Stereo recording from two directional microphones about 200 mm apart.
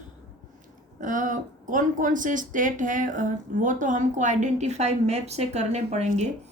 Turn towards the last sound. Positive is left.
turn(degrees=-35)  # may be behind; listen again after turning